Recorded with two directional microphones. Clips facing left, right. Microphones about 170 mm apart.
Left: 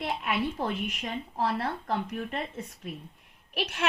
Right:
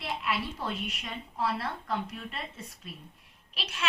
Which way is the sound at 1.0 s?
35° left (ahead or behind).